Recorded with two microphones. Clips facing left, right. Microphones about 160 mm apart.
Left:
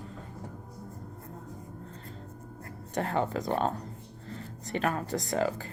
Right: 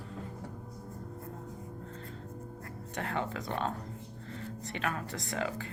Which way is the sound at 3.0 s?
35° left (ahead or behind).